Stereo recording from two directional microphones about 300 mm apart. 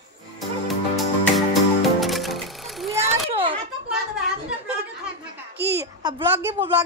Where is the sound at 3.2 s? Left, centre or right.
Centre.